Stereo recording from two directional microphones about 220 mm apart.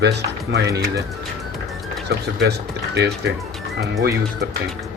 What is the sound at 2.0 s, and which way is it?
Speech, 50° right (ahead or behind).